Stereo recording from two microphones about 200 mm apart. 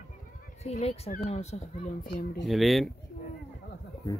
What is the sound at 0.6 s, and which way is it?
Speech, 30° left (ahead or behind).